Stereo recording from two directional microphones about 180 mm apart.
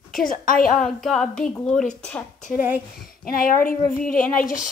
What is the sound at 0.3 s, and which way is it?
Speech, 50° left (ahead or behind).